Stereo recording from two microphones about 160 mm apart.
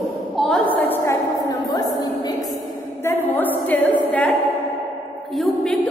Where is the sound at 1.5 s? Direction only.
25° left (ahead or behind).